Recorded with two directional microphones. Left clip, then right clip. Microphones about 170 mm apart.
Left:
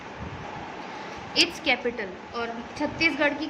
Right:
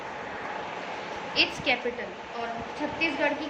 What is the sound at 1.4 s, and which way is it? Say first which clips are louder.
Speech: left 2 dB; 30° left (ahead or behind).